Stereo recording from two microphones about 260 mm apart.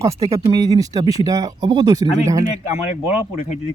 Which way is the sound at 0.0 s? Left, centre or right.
Centre.